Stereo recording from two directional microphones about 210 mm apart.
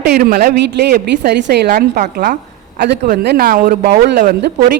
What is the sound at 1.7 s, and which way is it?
Speech, 40° right (ahead or behind).